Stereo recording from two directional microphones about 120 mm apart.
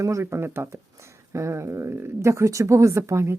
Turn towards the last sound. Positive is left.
turn(degrees=-25)  # may be behind; listen again after turning